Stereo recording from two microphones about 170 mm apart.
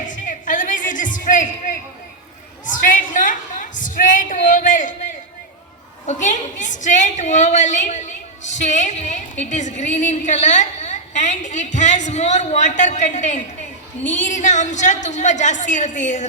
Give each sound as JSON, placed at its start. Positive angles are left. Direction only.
{"t": 0.1, "sound": "music", "side_deg": 50}
{"t": 2.6, "sound": "a sound", "side_deg": 50}
{"t": 6.1, "sound": "a woman's voice", "side_deg": 45}